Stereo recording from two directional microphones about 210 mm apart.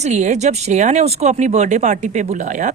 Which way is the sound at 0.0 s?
35° right (ahead or behind).